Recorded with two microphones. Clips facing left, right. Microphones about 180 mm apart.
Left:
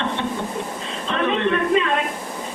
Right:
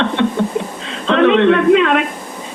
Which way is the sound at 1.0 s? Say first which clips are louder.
Right 11 dB; 90° right.